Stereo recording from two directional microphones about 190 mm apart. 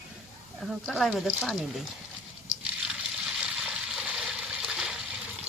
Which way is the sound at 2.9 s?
Centre (ahead or behind).